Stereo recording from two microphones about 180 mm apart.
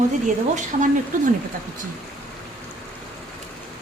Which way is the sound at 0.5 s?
45° right (ahead or behind).